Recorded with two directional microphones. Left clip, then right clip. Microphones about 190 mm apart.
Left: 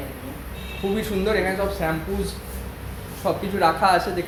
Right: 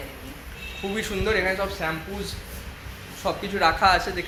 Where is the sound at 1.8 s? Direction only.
20° right (ahead or behind).